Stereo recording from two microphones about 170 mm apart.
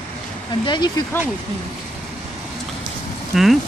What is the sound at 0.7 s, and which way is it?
Speech, 25° left (ahead or behind).